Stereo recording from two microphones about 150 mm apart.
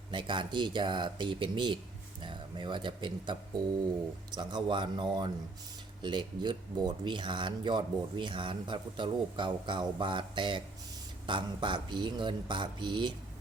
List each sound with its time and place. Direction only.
0.1 s speech: 30° right (ahead or behind)